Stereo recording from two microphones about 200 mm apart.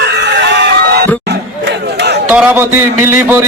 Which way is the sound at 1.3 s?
55° right (ahead or behind).